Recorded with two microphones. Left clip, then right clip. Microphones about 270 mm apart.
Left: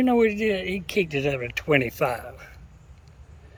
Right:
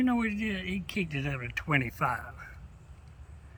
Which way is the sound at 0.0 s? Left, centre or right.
Centre.